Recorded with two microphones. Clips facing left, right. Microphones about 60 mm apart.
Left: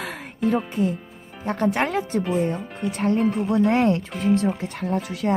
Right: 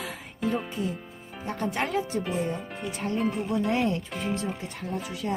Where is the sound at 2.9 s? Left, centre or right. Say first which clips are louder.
Left 9 dB; left.